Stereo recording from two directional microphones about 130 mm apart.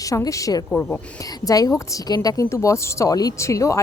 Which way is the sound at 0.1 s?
25° left (ahead or behind).